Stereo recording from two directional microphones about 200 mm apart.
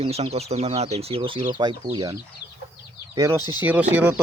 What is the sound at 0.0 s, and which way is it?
Speech, 30° right (ahead or behind).